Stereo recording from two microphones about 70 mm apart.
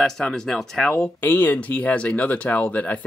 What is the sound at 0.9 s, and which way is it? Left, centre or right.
Speech, left.